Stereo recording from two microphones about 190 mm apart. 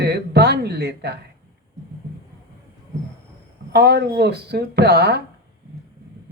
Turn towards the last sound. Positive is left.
turn(degrees=-60)  # may be behind; listen again after turning